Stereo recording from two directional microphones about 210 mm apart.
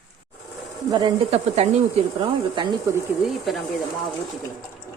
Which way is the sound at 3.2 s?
Centre (ahead or behind).